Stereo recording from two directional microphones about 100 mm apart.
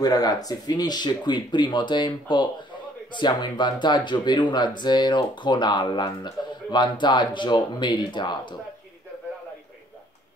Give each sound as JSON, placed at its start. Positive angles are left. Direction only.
{"t": 0.0, "sound": "speech", "side_deg": 40}